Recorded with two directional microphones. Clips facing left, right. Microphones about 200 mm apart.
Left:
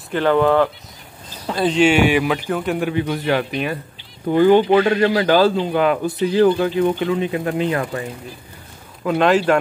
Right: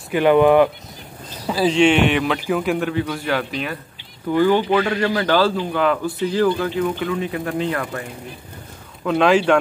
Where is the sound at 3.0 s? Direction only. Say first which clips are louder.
Left 3 dB; 20° left (ahead or behind).